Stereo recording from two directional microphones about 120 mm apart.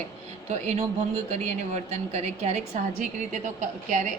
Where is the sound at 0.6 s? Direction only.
75° right (ahead or behind).